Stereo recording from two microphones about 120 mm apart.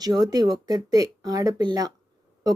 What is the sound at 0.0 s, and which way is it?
Speech, 30° right (ahead or behind).